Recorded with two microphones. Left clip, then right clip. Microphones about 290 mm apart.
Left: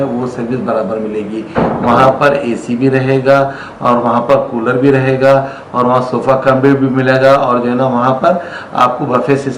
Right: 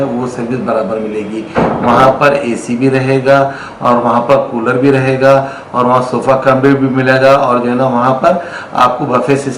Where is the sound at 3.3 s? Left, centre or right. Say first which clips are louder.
Right 1 dB; centre.